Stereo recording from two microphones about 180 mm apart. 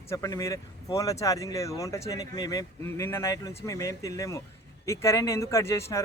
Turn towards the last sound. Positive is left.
turn(degrees=15)  # may be behind; listen again after turning